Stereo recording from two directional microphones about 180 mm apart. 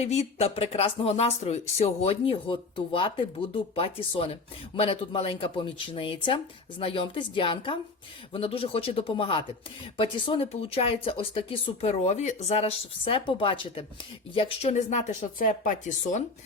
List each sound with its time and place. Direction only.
0.0 s speech: 35° left (ahead or behind)